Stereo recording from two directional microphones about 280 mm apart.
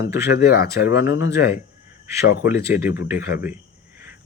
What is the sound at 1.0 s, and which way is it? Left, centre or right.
Speech, centre.